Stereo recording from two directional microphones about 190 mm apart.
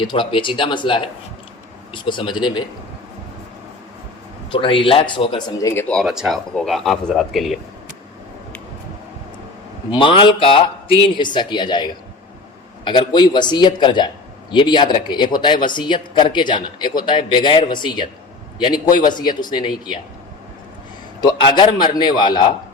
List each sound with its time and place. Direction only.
0.0 s speech: 25° left (ahead or behind)
4.5 s speech: 25° left (ahead or behind)
5.9 s speech: centre (ahead or behind)
9.9 s speech: 25° left (ahead or behind)
21.2 s speech: 25° left (ahead or behind)